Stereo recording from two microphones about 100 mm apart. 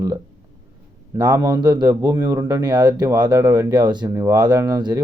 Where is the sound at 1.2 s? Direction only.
40° right (ahead or behind).